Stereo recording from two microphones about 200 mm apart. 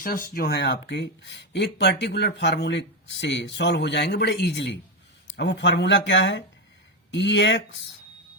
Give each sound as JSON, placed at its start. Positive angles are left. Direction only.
{"t": 0.0, "sound": "speech", "side_deg": 45}